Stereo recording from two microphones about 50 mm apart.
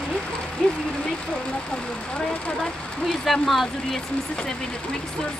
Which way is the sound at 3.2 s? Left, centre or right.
Centre.